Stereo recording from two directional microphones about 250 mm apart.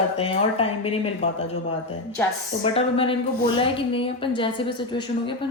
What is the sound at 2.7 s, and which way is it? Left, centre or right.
A man's voice, left.